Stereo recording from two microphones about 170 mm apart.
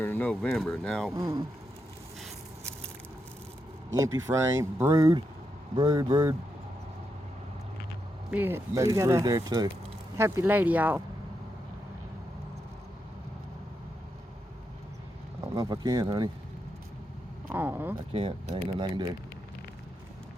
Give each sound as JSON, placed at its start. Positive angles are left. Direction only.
{"t": 0.0, "sound": "speech", "side_deg": 10}
{"t": 1.1, "sound": "speech", "side_deg": -20}
{"t": 2.2, "sound": "a sound", "side_deg": 5}
{"t": 4.5, "sound": "speech", "side_deg": -20}
{"t": 8.3, "sound": "speech", "side_deg": -10}
{"t": 15.4, "sound": "speech", "side_deg": -20}
{"t": 17.5, "sound": "speech", "side_deg": -10}
{"t": 18.1, "sound": "speech", "side_deg": -35}